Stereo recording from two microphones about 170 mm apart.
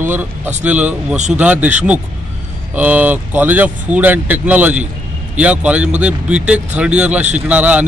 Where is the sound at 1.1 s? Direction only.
45° right (ahead or behind).